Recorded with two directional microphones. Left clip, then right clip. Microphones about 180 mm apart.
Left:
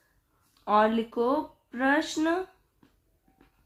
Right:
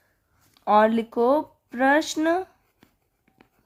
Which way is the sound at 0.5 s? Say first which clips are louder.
Right 5 dB; 35° right (ahead or behind).